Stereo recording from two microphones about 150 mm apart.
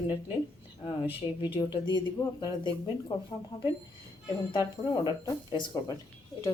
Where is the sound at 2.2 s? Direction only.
15° left (ahead or behind).